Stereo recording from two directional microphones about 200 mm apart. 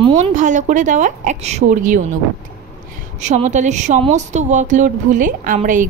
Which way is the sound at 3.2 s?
35° right (ahead or behind).